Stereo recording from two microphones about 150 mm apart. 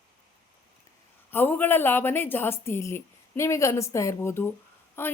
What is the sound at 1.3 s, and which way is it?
A woman's voice, 15° left (ahead or behind).